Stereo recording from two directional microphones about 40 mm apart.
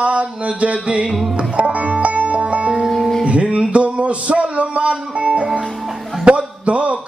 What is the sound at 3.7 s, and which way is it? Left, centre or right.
Speech, right.